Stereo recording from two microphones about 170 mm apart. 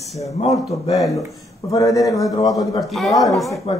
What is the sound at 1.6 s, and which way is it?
Speech, 20° left (ahead or behind).